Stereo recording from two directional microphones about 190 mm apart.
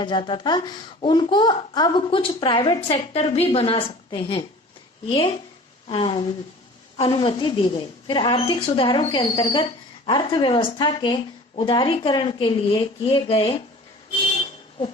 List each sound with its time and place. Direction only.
0.0 s speech: 25° left (ahead or behind)
5.9 s speech: 25° left (ahead or behind)